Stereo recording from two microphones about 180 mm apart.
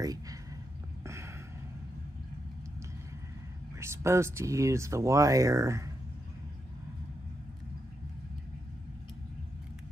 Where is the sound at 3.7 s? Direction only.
15° right (ahead or behind).